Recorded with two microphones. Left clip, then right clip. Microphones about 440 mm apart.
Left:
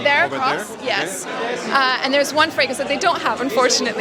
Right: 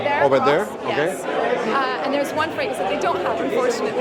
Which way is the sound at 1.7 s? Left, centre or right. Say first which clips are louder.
Left 4 dB; left.